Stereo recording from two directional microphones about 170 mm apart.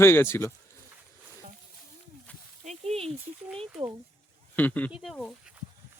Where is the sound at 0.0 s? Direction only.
15° left (ahead or behind).